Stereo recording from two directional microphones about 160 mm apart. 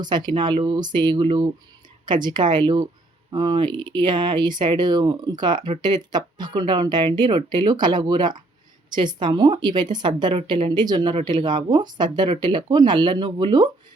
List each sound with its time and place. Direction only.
0.0 s a woman's voice: 30° right (ahead or behind)